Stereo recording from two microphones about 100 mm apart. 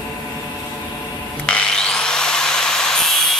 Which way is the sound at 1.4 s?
10° left (ahead or behind).